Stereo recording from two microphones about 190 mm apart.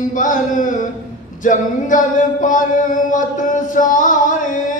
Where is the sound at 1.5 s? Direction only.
45° left (ahead or behind).